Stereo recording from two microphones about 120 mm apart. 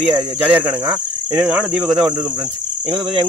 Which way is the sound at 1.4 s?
10° right (ahead or behind).